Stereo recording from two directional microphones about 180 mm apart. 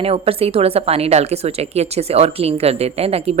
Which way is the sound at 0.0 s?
30° right (ahead or behind).